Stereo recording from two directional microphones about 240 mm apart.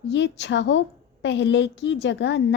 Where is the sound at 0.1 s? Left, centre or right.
Left.